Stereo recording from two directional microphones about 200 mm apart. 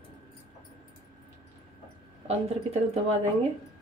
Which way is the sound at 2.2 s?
35° right (ahead or behind).